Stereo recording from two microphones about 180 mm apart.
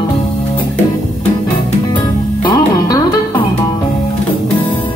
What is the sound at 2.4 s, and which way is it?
Music, 20° left (ahead or behind).